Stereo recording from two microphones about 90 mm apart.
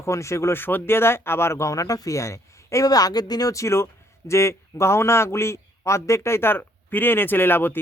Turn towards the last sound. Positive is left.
turn(degrees=25)  # may be behind; listen again after turning